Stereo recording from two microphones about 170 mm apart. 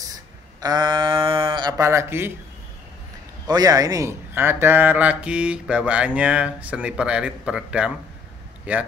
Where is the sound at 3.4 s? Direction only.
20° right (ahead or behind).